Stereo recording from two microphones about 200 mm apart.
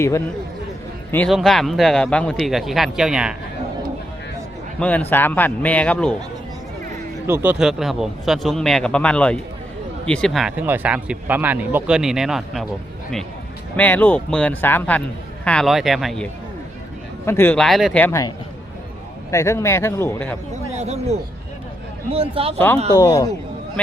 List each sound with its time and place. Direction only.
1.1 s speech: 5° left (ahead or behind)
4.8 s a man's voice: 5° left (ahead or behind)
7.3 s speech: 10° right (ahead or behind)
13.7 s a man's voice: 10° left (ahead or behind)
18.0 s a man's voice: 15° left (ahead or behind)
20.5 s speech: 35° right (ahead or behind)
22.5 s a man's voice: 10° left (ahead or behind)